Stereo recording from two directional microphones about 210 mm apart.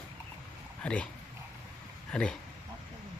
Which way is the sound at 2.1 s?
5° left (ahead or behind).